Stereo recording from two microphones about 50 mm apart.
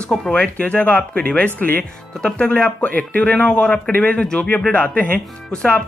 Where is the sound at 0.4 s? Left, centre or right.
Left.